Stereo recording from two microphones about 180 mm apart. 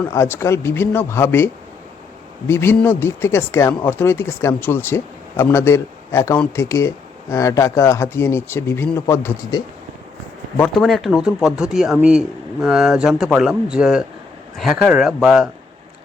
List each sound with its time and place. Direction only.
0.0 s speech: 15° left (ahead or behind)
2.5 s speech: 15° left (ahead or behind)
10.6 s a man's voice: 5° left (ahead or behind)